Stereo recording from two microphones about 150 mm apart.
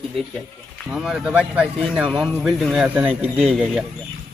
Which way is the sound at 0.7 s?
Centre (ahead or behind).